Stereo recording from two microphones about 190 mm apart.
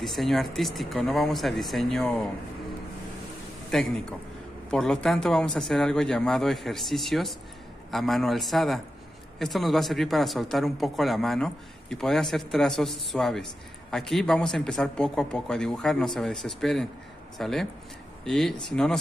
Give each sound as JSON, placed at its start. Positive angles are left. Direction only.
{"t": 0.0, "sound": "speech", "side_deg": 0}
{"t": 3.7, "sound": "speech", "side_deg": 5}